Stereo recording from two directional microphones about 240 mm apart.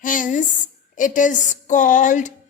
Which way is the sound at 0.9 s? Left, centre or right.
Left.